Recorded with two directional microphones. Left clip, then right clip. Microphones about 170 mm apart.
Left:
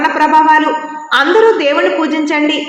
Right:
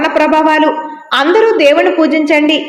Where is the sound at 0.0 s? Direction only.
30° right (ahead or behind).